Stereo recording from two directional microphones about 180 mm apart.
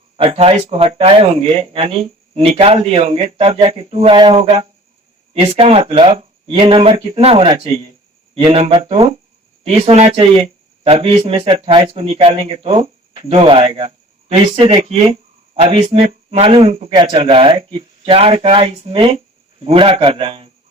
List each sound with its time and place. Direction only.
0.2 s speech: 30° right (ahead or behind)